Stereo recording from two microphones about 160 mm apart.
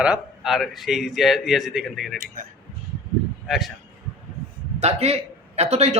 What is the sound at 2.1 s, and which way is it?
Speech, 60° right (ahead or behind).